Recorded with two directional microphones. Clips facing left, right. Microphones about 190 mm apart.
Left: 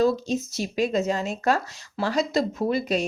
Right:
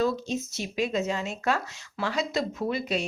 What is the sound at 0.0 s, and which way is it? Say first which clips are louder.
Speech: left 5 dB; 35° left (ahead or behind).